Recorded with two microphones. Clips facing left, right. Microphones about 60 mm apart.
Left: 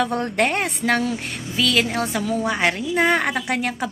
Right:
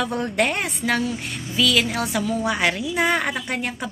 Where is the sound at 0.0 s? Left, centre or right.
Left.